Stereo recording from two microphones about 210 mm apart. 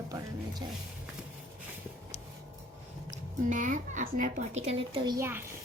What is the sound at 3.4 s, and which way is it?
Speech, 35° right (ahead or behind).